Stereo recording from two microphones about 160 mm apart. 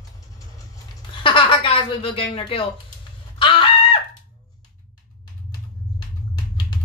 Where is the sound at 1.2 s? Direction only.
30° left (ahead or behind).